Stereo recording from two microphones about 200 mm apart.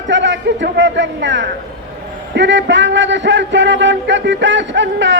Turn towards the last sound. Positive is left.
turn(degrees=-65)  # may be behind; listen again after turning